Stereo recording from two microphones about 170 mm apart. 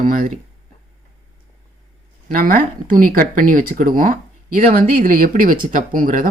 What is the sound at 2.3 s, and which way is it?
Speech, 55° right (ahead or behind).